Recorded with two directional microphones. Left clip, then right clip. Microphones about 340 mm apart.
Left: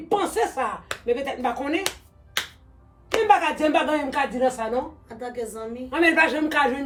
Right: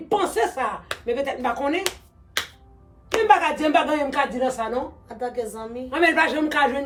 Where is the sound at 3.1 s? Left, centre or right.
Centre.